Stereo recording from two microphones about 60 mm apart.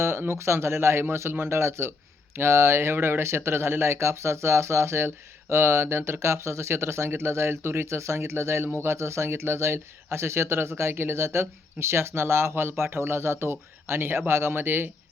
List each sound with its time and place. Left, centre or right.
0.0 s speech: right